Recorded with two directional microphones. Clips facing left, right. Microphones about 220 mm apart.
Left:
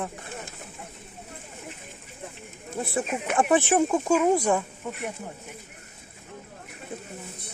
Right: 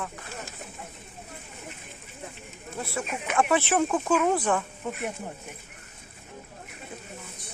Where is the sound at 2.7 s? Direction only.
20° left (ahead or behind).